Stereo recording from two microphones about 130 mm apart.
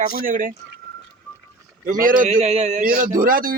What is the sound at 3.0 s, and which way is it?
Speech, 85° right.